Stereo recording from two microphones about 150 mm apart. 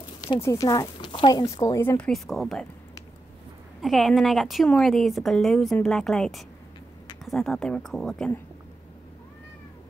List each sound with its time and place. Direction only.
0.2 s speech: 20° left (ahead or behind); by 2.7 s 5° left (ahead or behind)
3.8 s a woman's voice: centre (ahead or behind)